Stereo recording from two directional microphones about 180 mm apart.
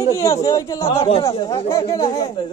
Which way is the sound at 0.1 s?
15° left (ahead or behind).